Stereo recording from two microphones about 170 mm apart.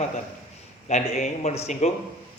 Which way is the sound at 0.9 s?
45° left (ahead or behind).